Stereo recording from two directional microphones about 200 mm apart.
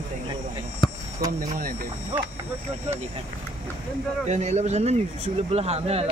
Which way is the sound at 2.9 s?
35° right (ahead or behind).